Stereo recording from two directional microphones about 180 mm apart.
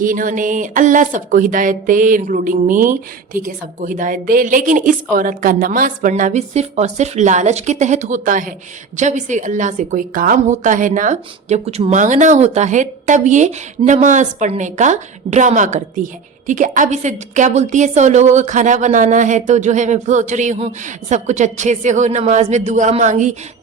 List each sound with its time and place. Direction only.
0.0 s a woman's voice: 50° right (ahead or behind)